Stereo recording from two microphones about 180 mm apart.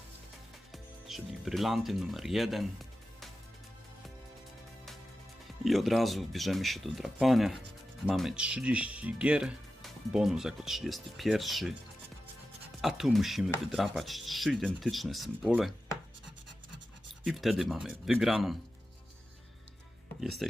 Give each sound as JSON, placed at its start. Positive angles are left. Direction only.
{"t": 0.7, "sound": "speech", "side_deg": 0}
{"t": 5.6, "sound": "speech", "side_deg": 0}
{"t": 12.8, "sound": "speech", "side_deg": 0}
{"t": 17.2, "sound": "speech", "side_deg": 0}
{"t": 20.4, "sound": "speech", "side_deg": 0}